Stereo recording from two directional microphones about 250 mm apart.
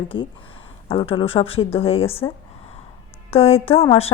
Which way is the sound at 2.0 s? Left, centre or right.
Centre.